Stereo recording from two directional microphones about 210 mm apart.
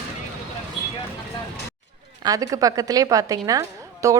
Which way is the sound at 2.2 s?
15° right (ahead or behind).